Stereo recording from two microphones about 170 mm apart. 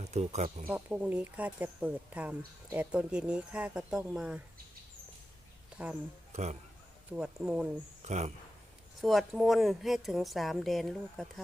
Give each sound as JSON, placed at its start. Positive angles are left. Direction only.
{"t": 0.0, "sound": "speech", "side_deg": -40}
{"t": 0.7, "sound": "a woman's voice", "side_deg": -10}
{"t": 5.7, "sound": "speech", "side_deg": -5}
{"t": 6.3, "sound": "speech", "side_deg": -40}
{"t": 7.1, "sound": "a woman's voice", "side_deg": -5}
{"t": 8.0, "sound": "speech", "side_deg": -40}
{"t": 9.0, "sound": "a woman's voice", "side_deg": 0}